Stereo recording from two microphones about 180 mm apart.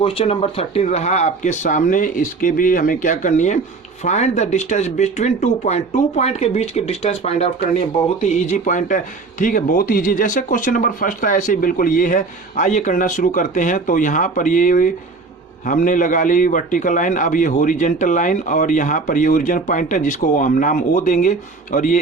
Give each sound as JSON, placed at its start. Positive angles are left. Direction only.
{"t": 0.0, "sound": "a man's voice", "side_deg": 30}